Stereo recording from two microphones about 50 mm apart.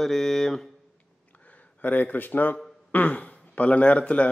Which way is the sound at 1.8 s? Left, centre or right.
Left.